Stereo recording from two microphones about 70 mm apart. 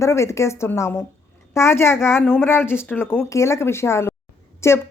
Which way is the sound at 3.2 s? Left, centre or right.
Left.